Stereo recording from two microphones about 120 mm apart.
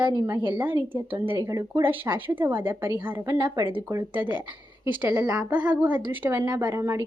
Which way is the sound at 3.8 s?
20° right (ahead or behind).